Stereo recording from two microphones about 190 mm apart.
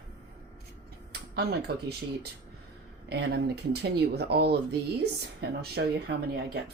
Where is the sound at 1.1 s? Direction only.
60° right (ahead or behind).